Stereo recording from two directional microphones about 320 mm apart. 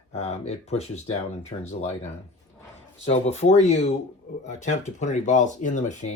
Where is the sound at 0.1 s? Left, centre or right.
Centre.